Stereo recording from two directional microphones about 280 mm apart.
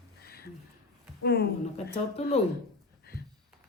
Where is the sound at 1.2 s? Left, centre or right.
Left.